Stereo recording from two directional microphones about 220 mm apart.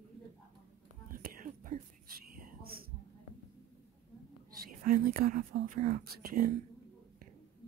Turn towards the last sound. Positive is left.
turn(degrees=-40)  # may be behind; listen again after turning